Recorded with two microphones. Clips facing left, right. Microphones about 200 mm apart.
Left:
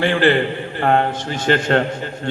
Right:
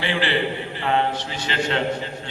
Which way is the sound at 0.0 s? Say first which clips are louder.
Left 7 dB; 50° left (ahead or behind).